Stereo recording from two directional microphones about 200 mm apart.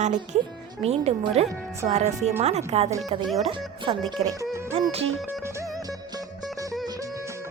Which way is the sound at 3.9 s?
25° right (ahead or behind).